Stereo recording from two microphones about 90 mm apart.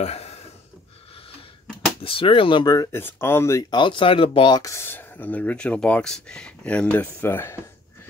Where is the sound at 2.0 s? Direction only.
75° left (ahead or behind).